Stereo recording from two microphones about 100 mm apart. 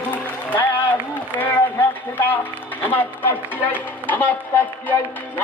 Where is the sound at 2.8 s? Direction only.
20° left (ahead or behind).